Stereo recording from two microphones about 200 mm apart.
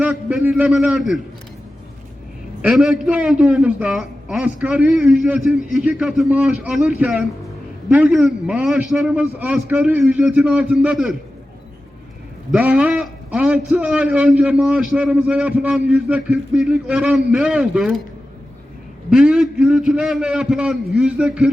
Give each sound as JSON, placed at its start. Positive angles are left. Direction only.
{"t": 0.0, "sound": "a man's voice", "side_deg": -5}
{"t": 2.6, "sound": "a man's voice", "side_deg": -5}
{"t": 12.5, "sound": "a man's voice", "side_deg": -5}
{"t": 19.1, "sound": "a man's voice", "side_deg": -5}